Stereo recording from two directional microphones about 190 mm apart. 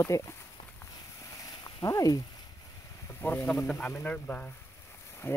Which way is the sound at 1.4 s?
20° left (ahead or behind).